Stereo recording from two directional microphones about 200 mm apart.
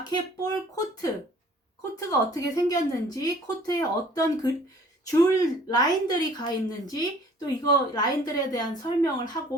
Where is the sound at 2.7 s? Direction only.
20° left (ahead or behind).